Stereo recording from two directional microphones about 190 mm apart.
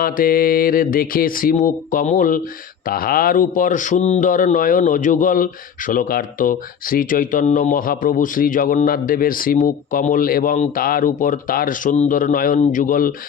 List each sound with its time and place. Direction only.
0.0 s speech: 50° left (ahead or behind)